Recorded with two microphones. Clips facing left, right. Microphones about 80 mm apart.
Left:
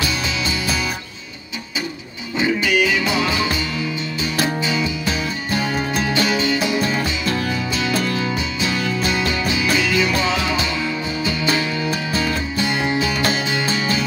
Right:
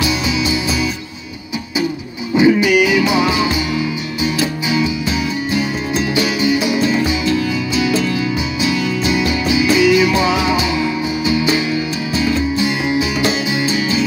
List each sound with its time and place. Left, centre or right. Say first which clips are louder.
0.0 s music: right 5 dB; centre
2.3 s music: right 7 dB; centre
4.6 s music: right 4 dB; centre
7.2 s music: right 4 dB; left
9.1 s music: right 5 dB; centre